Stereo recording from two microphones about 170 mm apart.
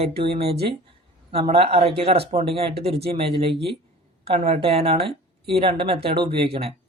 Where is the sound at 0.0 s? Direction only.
35° right (ahead or behind).